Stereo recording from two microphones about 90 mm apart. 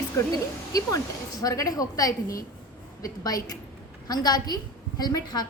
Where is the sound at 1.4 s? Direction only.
40° left (ahead or behind).